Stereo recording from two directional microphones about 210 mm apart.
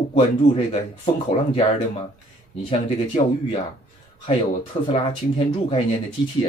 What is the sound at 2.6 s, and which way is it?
Speech, 25° left (ahead or behind).